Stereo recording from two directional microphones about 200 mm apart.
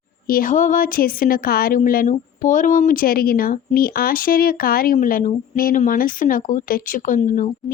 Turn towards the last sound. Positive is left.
turn(degrees=40)  # may be behind; listen again after turning